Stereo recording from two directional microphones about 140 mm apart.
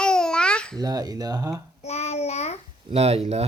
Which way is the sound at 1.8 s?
50° left (ahead or behind).